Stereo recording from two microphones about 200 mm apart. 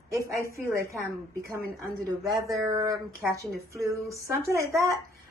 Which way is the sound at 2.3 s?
15° right (ahead or behind).